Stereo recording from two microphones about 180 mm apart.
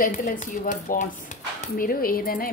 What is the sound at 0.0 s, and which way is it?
A woman's voice, 50° left (ahead or behind).